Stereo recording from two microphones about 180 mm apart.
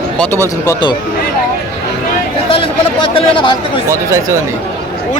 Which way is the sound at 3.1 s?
30° left (ahead or behind).